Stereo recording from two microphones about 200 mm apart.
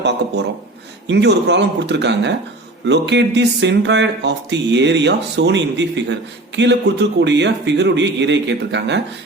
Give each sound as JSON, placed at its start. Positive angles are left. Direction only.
{"t": 1.0, "sound": "speech", "side_deg": -60}